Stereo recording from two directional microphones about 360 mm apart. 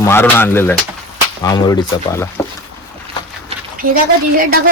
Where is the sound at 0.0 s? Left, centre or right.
Centre.